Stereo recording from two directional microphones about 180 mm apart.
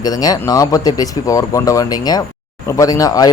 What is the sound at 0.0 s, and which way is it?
Speech, 20° left (ahead or behind).